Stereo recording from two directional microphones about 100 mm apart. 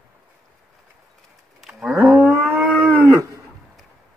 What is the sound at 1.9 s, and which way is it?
Livestock, 20° right (ahead or behind).